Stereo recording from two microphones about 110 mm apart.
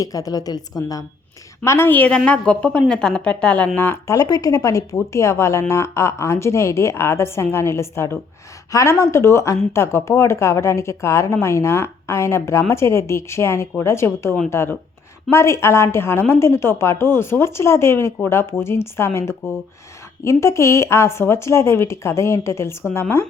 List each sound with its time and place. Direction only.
0.0 s a woman's voice: 30° left (ahead or behind)
1.6 s a woman's voice: 25° left (ahead or behind)
3.8 s speech: 20° left (ahead or behind)